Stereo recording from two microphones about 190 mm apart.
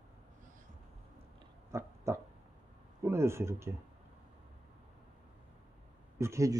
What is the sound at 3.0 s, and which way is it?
Speech, 15° right (ahead or behind).